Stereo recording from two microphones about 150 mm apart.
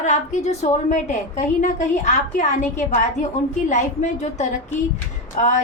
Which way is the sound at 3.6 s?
55° left (ahead or behind).